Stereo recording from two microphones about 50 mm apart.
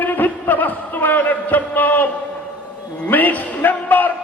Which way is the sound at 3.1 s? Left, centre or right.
Left.